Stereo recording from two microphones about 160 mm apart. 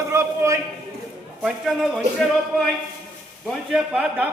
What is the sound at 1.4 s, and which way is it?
Speech, 5° right (ahead or behind).